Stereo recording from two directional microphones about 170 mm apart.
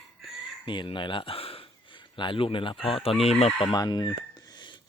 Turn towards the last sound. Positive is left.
turn(degrees=25)  # may be behind; listen again after turning